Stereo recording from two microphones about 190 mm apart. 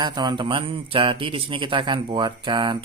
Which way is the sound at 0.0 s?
25° right (ahead or behind).